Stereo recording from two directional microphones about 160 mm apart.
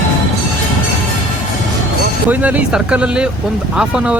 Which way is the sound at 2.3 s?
10° right (ahead or behind).